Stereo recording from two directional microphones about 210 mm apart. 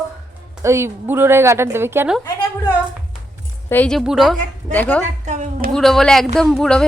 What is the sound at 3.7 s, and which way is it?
A woman's voice, 5° left (ahead or behind).